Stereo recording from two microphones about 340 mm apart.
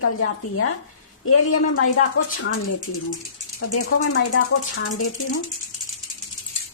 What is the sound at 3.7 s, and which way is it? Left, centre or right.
A woman's voice, left.